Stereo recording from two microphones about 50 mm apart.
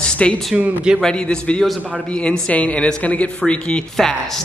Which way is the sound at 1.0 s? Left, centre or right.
Centre.